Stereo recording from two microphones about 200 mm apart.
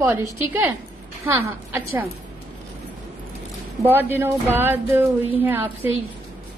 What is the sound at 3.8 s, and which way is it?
A woman's voice, 10° right (ahead or behind).